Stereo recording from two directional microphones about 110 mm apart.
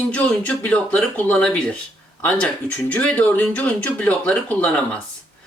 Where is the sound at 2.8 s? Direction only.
10° left (ahead or behind).